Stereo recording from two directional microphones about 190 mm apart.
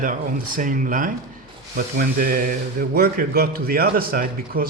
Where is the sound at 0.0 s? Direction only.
45° right (ahead or behind).